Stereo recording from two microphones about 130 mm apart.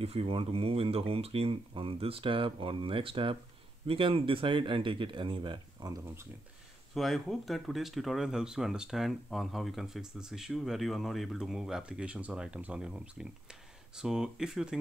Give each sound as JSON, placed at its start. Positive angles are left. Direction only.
{"t": 0.0, "sound": "speech", "side_deg": -45}
{"t": 6.9, "sound": "speech", "side_deg": 0}